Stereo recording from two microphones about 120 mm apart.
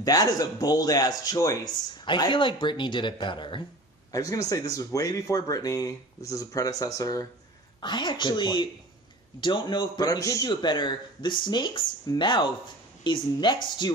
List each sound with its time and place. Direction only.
0.0 s speech: 30° left (ahead or behind)
4.1 s speech: 30° left (ahead or behind)
10.5 s speech: 40° left (ahead or behind)